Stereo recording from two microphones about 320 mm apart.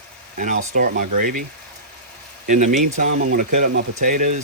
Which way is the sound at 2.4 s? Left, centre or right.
Right.